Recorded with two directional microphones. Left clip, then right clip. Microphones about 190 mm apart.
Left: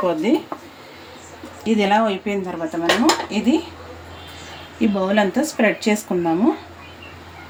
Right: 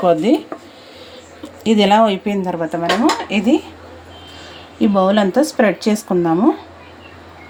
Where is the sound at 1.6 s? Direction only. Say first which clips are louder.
Right 5 dB; 45° right (ahead or behind).